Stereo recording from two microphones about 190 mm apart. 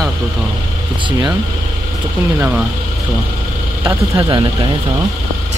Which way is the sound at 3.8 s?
20° right (ahead or behind).